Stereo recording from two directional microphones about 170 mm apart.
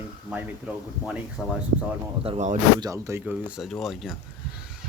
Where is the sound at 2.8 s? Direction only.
20° right (ahead or behind); by 4.2 s centre (ahead or behind).